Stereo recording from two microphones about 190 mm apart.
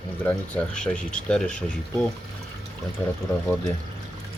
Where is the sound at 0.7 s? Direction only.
5° left (ahead or behind).